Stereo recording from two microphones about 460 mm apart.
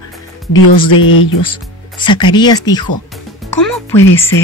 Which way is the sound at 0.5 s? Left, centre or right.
Left.